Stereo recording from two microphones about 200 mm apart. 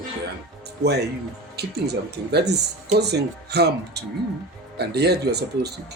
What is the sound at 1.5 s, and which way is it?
Speech, 55° right (ahead or behind).